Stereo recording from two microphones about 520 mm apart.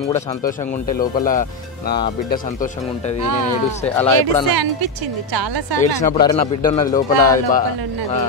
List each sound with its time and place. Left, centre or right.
0.4 s speech: centre
5.3 s a woman's voice: right
5.8 s speech: centre